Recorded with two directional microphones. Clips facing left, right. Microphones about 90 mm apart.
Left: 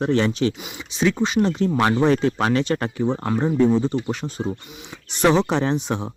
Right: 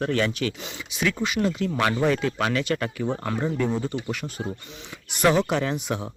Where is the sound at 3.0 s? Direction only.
15° left (ahead or behind).